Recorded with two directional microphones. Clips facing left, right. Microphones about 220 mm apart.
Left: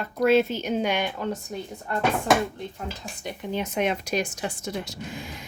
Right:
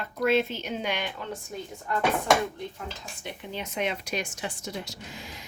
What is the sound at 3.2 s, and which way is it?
Speech, 50° left (ahead or behind).